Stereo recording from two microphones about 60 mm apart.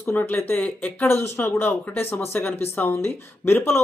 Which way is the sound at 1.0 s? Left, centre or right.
Left.